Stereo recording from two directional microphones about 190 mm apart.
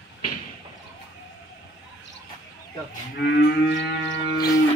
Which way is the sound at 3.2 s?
65° left (ahead or behind).